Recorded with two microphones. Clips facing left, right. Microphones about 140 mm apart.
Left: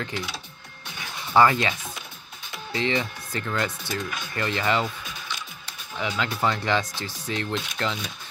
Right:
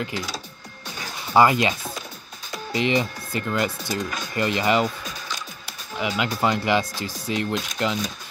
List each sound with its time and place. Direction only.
0.1 s speech: 40° right (ahead or behind)
0.8 s music: 40° right (ahead or behind)
1.3 s speech: 15° right (ahead or behind)
5.7 s music: 15° right (ahead or behind)
6.4 s speech: 15° right (ahead or behind)
7.5 s speech: 40° right (ahead or behind)